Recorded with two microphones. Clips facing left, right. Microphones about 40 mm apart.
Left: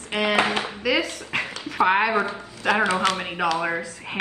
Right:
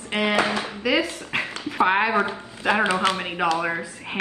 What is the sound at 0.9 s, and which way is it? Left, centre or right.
Speech, centre.